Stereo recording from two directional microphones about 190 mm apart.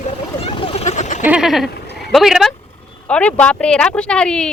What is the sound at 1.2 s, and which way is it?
Speech, 5° right (ahead or behind).